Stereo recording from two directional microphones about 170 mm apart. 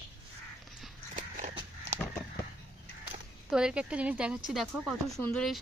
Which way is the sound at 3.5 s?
5° right (ahead or behind).